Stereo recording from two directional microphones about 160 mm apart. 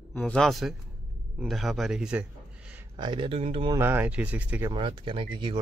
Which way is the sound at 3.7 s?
15° right (ahead or behind).